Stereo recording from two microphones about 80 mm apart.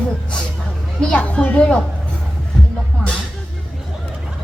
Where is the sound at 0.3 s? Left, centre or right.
Centre.